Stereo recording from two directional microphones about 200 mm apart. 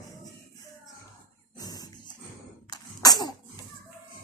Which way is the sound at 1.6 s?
20° left (ahead or behind).